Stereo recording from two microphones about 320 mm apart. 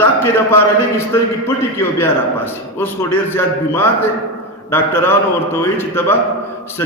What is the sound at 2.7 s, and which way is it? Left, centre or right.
A man's voice, centre.